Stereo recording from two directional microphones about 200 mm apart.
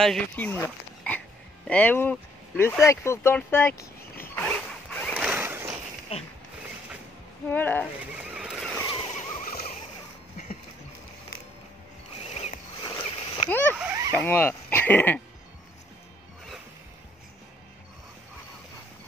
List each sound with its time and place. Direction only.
0.0 s speech: 5° left (ahead or behind)
5.2 s a sound: 10° right (ahead or behind)
6.1 s speech: 30° left (ahead or behind)
7.4 s speech: 10° left (ahead or behind)
7.8 s horse: 5° right (ahead or behind)
8.8 s vehicle: 25° left (ahead or behind); by 9.7 s 40° left (ahead or behind)
12.2 s a sound: 30° left (ahead or behind)
13.5 s speech: 10° left (ahead or behind)
13.7 s a sound: 15° right (ahead or behind)
14.1 s speech: 10° left (ahead or behind)